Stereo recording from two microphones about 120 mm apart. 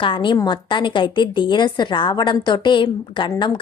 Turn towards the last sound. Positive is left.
turn(degrees=40)  # may be behind; listen again after turning